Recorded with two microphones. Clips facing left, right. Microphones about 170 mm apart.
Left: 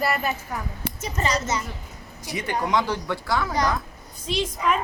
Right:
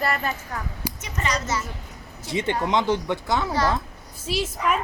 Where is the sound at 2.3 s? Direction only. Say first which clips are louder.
Right 1 dB; 25° right (ahead or behind).